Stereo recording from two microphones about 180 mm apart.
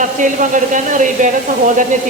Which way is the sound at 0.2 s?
45° right (ahead or behind).